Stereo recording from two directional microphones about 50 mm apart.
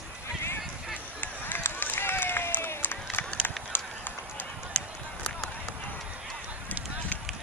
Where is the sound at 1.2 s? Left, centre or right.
Left.